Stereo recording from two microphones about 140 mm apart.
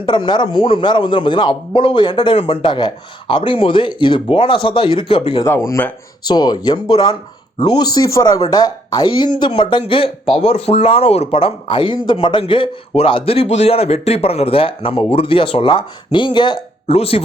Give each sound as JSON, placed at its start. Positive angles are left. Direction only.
{"t": 0.0, "sound": "speech", "side_deg": 35}
{"t": 16.9, "sound": "speech", "side_deg": 45}